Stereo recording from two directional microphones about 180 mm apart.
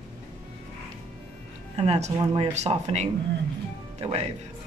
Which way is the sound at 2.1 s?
20° right (ahead or behind).